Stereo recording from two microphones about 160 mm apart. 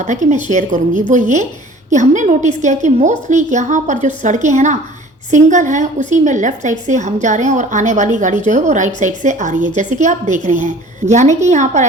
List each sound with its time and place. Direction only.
0.0 s a woman's voice: 50° right (ahead or behind)